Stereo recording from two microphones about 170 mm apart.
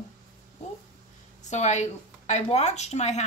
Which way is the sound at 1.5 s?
45° left (ahead or behind).